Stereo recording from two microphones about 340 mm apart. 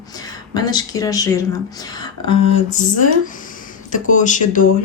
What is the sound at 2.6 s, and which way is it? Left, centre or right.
Music, left.